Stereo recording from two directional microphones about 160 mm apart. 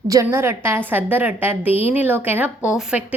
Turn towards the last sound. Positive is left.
turn(degrees=-5)  # may be behind; listen again after turning